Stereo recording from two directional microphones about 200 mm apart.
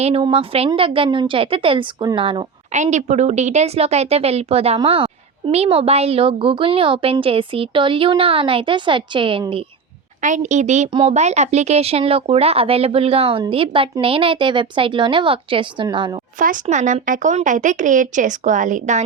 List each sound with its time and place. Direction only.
0.0 s a woman's voice: 30° right (ahead or behind)
2.7 s a woman's voice: 35° right (ahead or behind)
10.2 s a woman's voice: 40° right (ahead or behind); by 16.2 s 25° right (ahead or behind)
16.4 s speech: 40° right (ahead or behind)